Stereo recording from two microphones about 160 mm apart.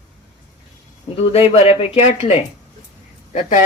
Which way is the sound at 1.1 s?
40° left (ahead or behind).